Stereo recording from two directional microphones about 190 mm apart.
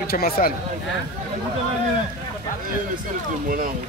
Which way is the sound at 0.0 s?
50° left (ahead or behind).